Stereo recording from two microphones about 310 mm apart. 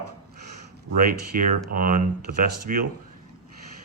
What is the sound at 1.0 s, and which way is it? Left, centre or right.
Speech, right.